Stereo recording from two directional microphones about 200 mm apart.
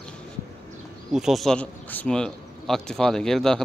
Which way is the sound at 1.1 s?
Centre (ahead or behind).